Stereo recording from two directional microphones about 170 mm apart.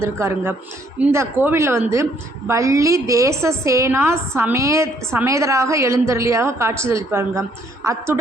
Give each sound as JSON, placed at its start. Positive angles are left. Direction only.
{"t": 0.0, "sound": "a woman's voice", "side_deg": -15}